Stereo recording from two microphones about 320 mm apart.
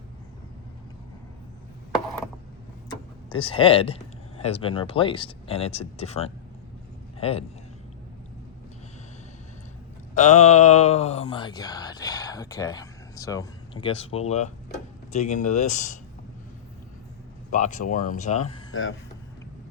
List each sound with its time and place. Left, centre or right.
3.2 s speech: centre
10.2 s speech: left
17.5 s speech: left
18.7 s speech: left